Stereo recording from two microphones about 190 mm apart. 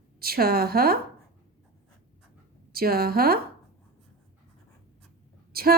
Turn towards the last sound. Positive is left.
turn(degrees=-50)  # may be behind; listen again after turning